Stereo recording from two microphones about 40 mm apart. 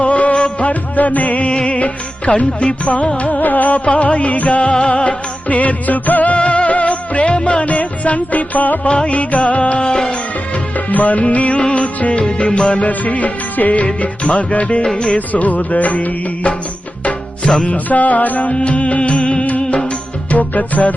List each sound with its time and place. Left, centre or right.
0.0 s music: left
6.3 s music: left
10.8 s music: left
12.2 s music: left
12.7 s music: left
14.9 s music: left
15.3 s music: left
17.5 s music: left
17.8 s music: left
18.5 s music: left